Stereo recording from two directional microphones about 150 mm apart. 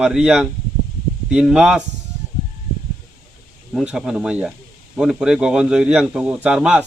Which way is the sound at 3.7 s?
5° right (ahead or behind).